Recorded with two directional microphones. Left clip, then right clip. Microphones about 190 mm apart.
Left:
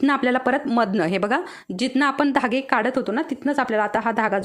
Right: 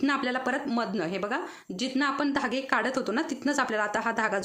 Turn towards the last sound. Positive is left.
turn(degrees=30)  # may be behind; listen again after turning